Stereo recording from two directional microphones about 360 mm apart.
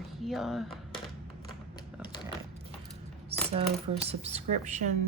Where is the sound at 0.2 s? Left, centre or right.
Centre.